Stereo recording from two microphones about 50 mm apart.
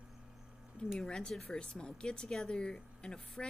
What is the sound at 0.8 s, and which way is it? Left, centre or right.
Speech, left.